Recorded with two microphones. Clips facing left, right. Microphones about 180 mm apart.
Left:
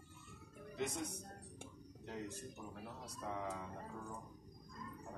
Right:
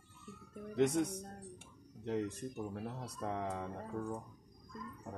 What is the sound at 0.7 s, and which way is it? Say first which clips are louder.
Speech: right 11 dB; 65° right (ahead or behind).